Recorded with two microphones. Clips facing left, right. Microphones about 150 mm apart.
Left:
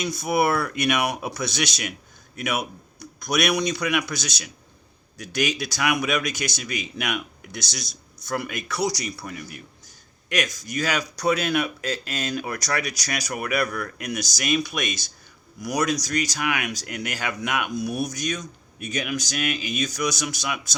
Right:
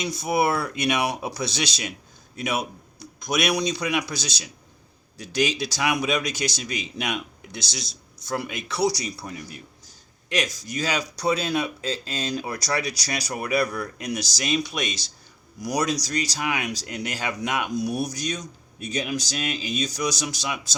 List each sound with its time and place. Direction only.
0.0 s a man's voice: 25° right (ahead or behind)